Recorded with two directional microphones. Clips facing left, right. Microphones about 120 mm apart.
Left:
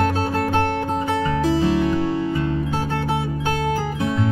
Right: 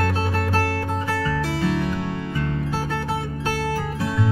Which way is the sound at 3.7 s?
25° left (ahead or behind).